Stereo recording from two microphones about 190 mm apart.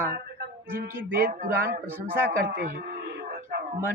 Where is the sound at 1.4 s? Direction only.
50° right (ahead or behind).